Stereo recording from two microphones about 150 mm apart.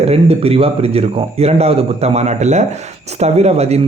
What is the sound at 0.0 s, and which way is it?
A man's voice, 40° right (ahead or behind).